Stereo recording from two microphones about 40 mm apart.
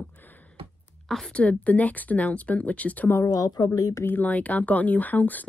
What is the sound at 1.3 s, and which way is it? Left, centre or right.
Speech, left.